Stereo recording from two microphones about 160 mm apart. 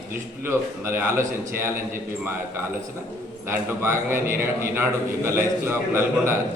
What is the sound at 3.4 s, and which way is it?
A man's voice, 15° right (ahead or behind).